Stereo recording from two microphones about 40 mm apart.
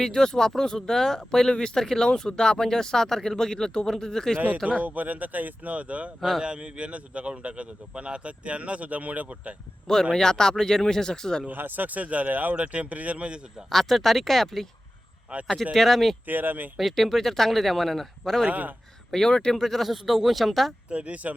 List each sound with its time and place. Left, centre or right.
0.0 s speech: centre
4.4 s a man's voice: right
9.8 s speech: centre
11.4 s speech: right
12.5 s a man's voice: right
13.7 s speech: centre
15.7 s speech: centre
16.2 s speech: right
16.7 s speech: centre
18.4 s a man's voice: right
19.1 s speech: centre
20.9 s a man's voice: right